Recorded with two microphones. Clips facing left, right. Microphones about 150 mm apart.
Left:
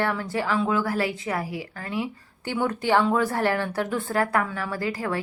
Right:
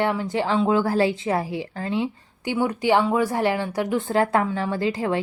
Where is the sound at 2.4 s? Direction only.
10° right (ahead or behind).